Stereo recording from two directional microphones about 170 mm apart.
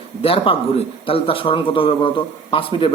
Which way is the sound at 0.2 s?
35° left (ahead or behind).